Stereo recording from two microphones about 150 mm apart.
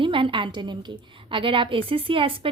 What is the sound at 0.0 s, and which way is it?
A woman's voice, 35° right (ahead or behind).